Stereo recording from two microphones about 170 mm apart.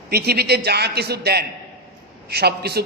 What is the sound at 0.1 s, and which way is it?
A man's voice, 70° right (ahead or behind).